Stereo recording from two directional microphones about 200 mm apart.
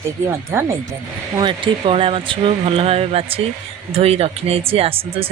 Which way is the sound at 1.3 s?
25° right (ahead or behind).